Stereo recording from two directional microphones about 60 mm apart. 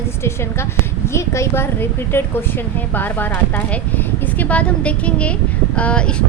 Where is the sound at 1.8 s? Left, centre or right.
Left.